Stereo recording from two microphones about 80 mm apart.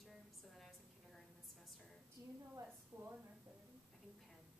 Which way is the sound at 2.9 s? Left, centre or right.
Right.